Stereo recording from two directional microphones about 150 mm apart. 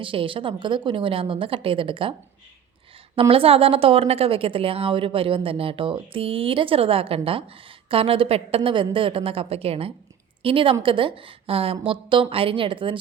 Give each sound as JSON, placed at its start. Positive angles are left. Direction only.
{"t": 0.0, "sound": "a woman's voice", "side_deg": -35}
{"t": 3.2, "sound": "a woman's voice", "side_deg": -40}